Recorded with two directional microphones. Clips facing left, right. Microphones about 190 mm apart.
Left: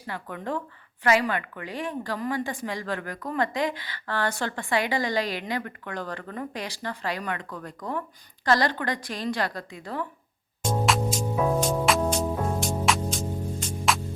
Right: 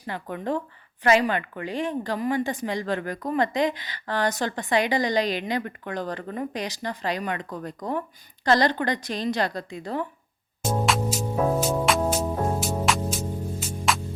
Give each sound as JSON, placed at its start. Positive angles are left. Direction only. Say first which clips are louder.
{"t": 0.1, "sound": "speech", "louder": "right 3 dB", "side_deg": -25}
{"t": 10.6, "sound": "music", "louder": "even", "side_deg": 0}